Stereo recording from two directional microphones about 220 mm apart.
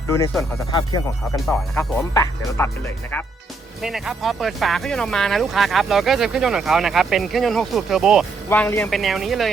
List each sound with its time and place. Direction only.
0.7 s speech: 20° left (ahead or behind)
1.5 s speech: 5° left (ahead or behind)
2.1 s speech: 15° left (ahead or behind)
3.8 s speech: centre (ahead or behind)
8.4 s speech: 10° left (ahead or behind)
8.9 s speech: centre (ahead or behind)